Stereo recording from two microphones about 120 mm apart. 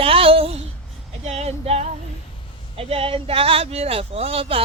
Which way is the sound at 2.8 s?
50° right (ahead or behind).